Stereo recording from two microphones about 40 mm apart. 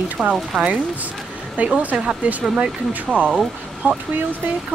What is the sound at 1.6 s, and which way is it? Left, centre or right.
Speech, right.